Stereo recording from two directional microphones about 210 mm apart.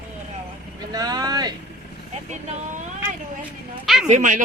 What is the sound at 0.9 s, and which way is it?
Vehicle, 20° right (ahead or behind).